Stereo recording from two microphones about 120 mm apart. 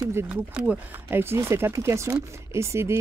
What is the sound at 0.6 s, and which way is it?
Speech, 15° right (ahead or behind).